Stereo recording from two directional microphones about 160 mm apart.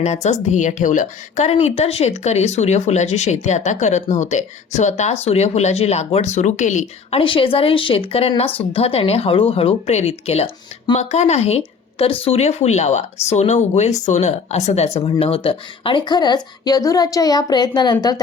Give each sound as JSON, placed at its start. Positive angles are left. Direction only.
{"t": 0.0, "sound": "a woman's voice", "side_deg": 45}
{"t": 7.2, "sound": "a woman's voice", "side_deg": 35}